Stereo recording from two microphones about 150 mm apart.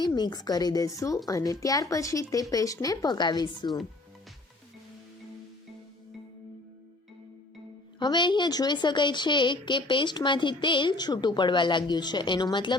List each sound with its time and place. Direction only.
0.0 s a woman's voice: 30° left (ahead or behind)
7.9 s a woman's voice: 30° left (ahead or behind)